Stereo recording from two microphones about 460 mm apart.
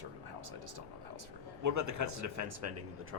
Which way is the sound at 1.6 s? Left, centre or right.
Right.